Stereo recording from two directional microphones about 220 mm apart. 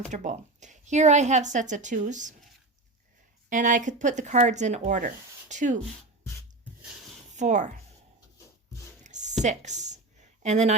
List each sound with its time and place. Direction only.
0.1 s speech: 35° right (ahead or behind)
3.5 s speech: 35° right (ahead or behind)
7.3 s speech: 35° right (ahead or behind)
9.0 s a sound: 35° right (ahead or behind)
9.4 s speech: 30° right (ahead or behind)